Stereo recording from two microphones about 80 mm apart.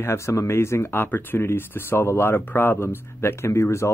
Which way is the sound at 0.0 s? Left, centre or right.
Left.